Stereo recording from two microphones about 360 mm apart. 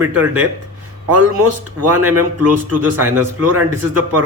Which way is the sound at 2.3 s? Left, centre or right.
Right.